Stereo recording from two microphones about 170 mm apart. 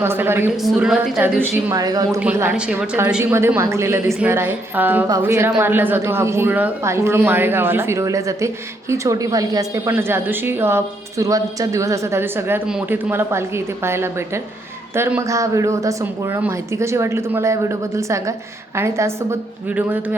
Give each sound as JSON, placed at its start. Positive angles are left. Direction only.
{"t": 0.0, "sound": "speech", "side_deg": -15}
{"t": 0.5, "sound": "a woman's voice", "side_deg": 0}
{"t": 2.2, "sound": "speech", "side_deg": -5}